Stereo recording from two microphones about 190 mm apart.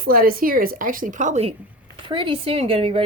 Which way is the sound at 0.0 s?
50° right (ahead or behind).